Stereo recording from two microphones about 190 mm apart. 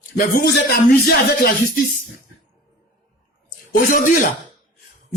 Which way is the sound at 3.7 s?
45° left (ahead or behind).